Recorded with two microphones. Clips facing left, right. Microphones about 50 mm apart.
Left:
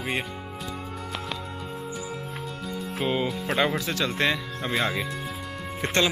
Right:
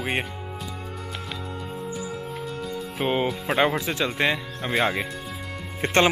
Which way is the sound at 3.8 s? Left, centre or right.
Right.